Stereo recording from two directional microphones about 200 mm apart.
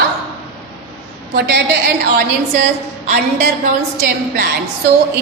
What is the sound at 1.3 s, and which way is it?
Speech, 55° right (ahead or behind).